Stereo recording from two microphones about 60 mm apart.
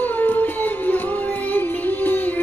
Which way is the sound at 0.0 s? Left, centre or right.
Left.